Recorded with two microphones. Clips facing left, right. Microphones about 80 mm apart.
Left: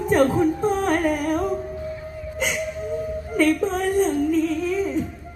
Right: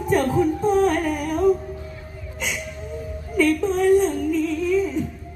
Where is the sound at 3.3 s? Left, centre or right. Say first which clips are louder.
Right 1 dB; left.